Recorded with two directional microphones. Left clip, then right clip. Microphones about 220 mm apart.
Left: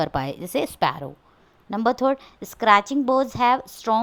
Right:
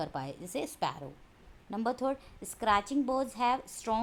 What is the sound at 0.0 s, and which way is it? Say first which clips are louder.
Speech: left 12 dB; 30° left (ahead or behind).